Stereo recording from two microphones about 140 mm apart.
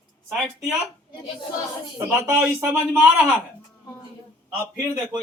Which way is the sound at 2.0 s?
15° right (ahead or behind).